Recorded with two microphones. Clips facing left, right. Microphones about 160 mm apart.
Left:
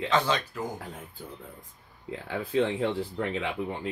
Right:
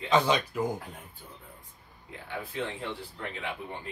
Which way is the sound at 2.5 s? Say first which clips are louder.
Left 11 dB; 90° left.